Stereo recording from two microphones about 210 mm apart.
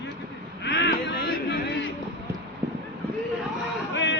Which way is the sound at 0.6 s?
55° left (ahead or behind).